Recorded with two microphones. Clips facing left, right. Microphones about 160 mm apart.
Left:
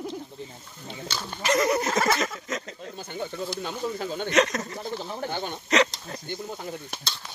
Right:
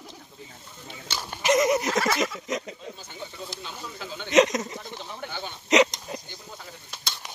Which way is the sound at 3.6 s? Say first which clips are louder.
Left 8 dB; 50° left (ahead or behind).